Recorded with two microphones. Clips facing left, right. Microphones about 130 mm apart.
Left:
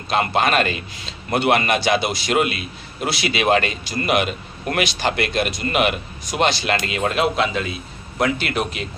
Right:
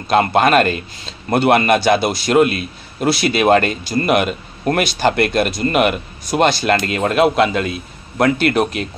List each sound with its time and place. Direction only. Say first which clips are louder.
0.1 s a man's voice: right 6 dB; 45° right (ahead or behind)